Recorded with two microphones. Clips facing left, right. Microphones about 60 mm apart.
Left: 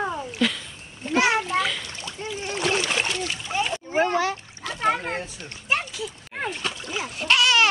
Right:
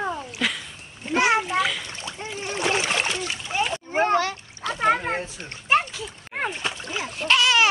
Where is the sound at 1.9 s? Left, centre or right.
Right.